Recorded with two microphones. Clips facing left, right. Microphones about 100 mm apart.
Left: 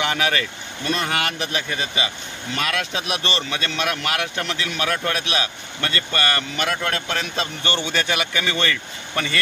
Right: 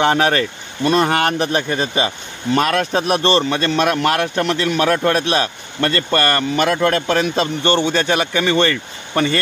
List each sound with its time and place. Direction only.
0.0 s speech: 40° right (ahead or behind)
7.6 s speech: 30° right (ahead or behind)